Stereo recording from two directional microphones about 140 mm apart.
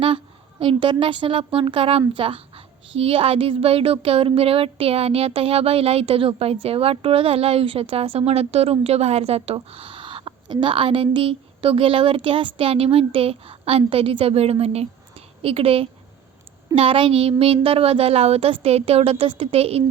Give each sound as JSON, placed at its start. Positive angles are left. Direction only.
{"t": 0.6, "sound": "speech", "side_deg": -40}